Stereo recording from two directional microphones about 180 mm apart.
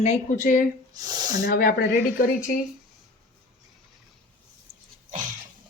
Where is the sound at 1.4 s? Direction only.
55° left (ahead or behind).